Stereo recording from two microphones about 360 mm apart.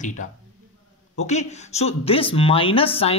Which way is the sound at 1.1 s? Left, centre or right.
Centre.